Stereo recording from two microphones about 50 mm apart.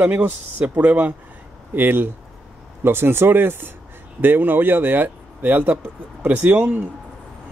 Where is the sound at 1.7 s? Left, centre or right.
Right.